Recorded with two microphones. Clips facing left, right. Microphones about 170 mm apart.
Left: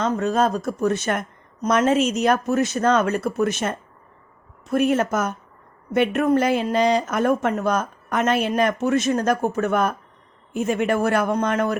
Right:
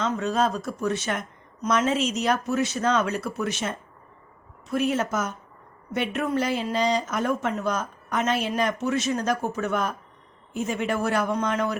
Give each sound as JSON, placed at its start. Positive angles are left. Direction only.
{"t": 0.2, "sound": "speech", "side_deg": 45}